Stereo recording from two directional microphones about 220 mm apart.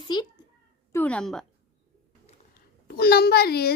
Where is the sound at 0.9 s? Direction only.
5° left (ahead or behind).